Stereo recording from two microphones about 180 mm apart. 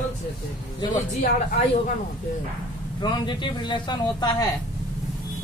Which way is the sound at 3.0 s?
25° left (ahead or behind).